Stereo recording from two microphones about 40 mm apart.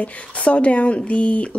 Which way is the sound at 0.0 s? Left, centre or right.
Left.